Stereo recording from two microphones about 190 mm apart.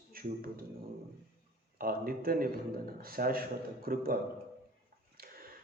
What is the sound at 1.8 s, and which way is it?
Speech, 50° right (ahead or behind).